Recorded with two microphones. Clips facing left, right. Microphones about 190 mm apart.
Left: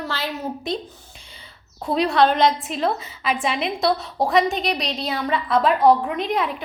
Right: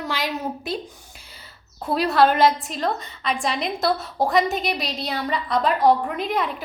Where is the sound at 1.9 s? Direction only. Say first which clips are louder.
Even; 5° right (ahead or behind).